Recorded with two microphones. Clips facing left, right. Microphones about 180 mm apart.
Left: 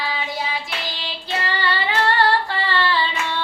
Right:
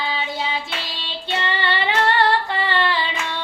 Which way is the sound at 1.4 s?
25° right (ahead or behind).